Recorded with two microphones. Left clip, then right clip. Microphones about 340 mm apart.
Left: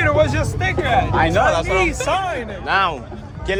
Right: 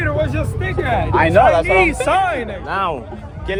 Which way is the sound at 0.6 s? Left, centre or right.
Centre.